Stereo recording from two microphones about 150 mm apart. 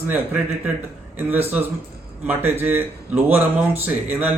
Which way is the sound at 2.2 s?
15° right (ahead or behind).